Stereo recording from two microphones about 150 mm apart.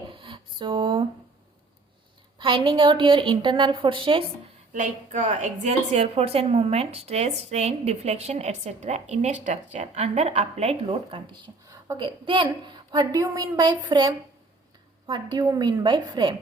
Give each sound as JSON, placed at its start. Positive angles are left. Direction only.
{"t": 0.1, "sound": "a sound", "side_deg": -35}
{"t": 2.4, "sound": "a woman's voice", "side_deg": -35}
{"t": 4.7, "sound": "a woman's voice", "side_deg": -55}